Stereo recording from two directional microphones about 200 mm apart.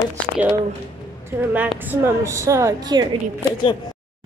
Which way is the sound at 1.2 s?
10° right (ahead or behind).